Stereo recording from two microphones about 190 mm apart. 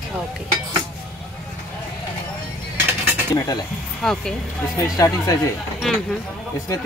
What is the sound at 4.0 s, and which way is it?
Speech, 5° left (ahead or behind).